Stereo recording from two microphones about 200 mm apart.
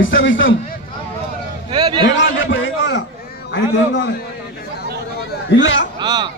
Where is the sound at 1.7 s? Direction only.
25° right (ahead or behind).